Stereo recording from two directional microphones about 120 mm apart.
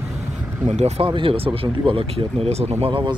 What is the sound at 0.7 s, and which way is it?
Speech, 65° right (ahead or behind).